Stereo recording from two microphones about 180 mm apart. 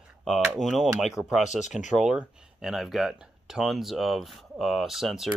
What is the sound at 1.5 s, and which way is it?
Speech, 40° left (ahead or behind).